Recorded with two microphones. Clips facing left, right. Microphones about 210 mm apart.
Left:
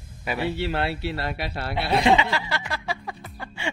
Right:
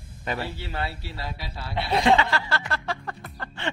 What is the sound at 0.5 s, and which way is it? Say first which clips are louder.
A man's voice: left 7 dB; 70° left (ahead or behind).